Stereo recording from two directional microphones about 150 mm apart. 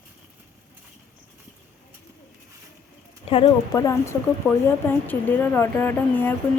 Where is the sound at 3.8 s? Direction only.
20° left (ahead or behind).